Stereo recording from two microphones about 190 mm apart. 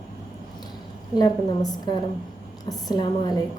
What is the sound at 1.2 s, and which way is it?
A woman's voice, 20° left (ahead or behind).